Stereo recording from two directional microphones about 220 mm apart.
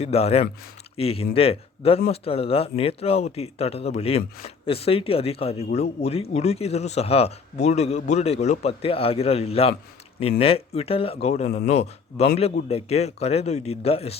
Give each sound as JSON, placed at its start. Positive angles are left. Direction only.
{"t": 0.0, "sound": "a man's voice", "side_deg": 30}